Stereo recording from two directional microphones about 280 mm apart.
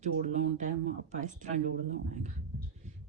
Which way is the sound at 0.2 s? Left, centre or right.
Right.